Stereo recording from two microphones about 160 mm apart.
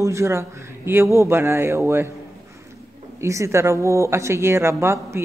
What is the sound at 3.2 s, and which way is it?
Speech, 20° right (ahead or behind).